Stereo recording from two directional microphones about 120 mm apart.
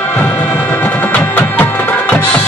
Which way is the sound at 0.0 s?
15° left (ahead or behind).